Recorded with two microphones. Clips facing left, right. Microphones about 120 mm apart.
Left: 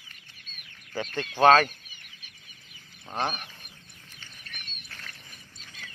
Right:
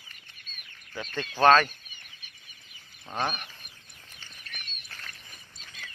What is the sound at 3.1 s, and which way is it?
Speech, 30° left (ahead or behind).